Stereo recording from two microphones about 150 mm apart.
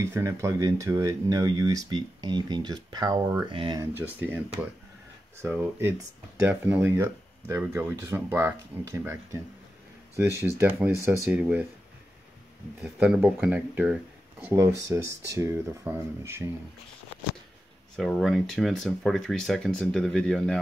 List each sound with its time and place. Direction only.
0.0 s speech: 20° right (ahead or behind)
3.4 s speech: 30° right (ahead or behind)
5.4 s speech: 15° right (ahead or behind)
10.4 s speech: 10° right (ahead or behind)
12.8 s speech: 10° right (ahead or behind)
14.4 s speech: 20° right (ahead or behind)
17.9 s speech: centre (ahead or behind)